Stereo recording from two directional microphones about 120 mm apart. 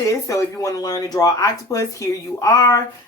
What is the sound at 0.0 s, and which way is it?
Speech, 25° left (ahead or behind).